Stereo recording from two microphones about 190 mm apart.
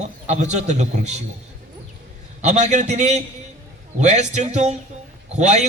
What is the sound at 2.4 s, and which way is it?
A man's voice, 40° right (ahead or behind).